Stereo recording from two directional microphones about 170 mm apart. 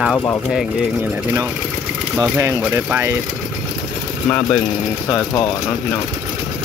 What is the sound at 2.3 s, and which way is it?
Speech, 15° right (ahead or behind).